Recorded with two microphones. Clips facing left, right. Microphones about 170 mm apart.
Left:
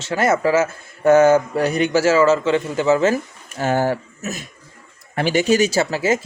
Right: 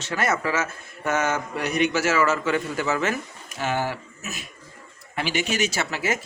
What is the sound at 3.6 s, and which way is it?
Speech, 40° left (ahead or behind).